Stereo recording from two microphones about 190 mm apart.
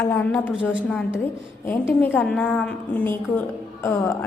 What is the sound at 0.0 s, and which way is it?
Speech, 10° left (ahead or behind).